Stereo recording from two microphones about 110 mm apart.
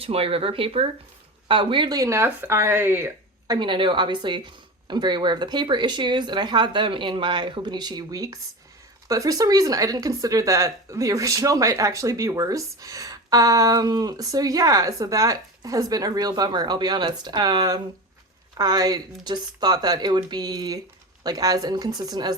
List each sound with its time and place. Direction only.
0.0 s speech: 60° right (ahead or behind); by 3.1 s 20° right (ahead or behind)
3.4 s speech: 40° right (ahead or behind)